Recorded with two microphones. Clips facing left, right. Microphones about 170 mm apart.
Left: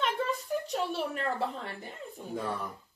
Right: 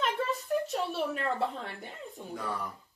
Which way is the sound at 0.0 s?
Centre (ahead or behind).